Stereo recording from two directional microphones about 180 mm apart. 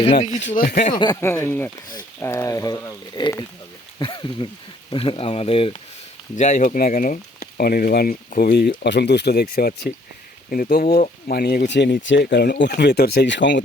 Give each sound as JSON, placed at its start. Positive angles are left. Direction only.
{"t": 0.0, "sound": "speech", "side_deg": 40}
{"t": 0.9, "sound": "speech", "side_deg": 20}
{"t": 6.3, "sound": "speech", "side_deg": 45}